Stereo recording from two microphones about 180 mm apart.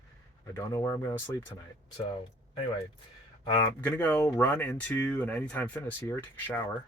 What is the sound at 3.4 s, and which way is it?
Speech, 20° left (ahead or behind).